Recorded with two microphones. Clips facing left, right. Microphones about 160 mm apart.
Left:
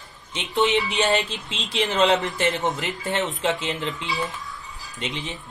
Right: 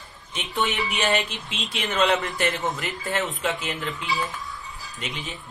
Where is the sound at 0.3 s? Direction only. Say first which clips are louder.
Left 5 dB; 20° left (ahead or behind).